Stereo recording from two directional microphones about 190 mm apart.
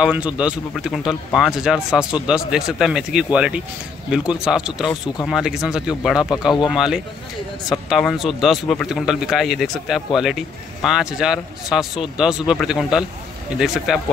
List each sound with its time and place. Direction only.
0.0 s speech: 5° right (ahead or behind)
6.2 s speech: 20° left (ahead or behind)
6.7 s speech: centre (ahead or behind)